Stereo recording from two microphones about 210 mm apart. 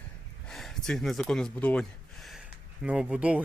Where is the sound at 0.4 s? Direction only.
Centre (ahead or behind).